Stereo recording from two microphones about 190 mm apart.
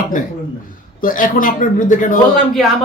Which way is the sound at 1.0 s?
45° left (ahead or behind).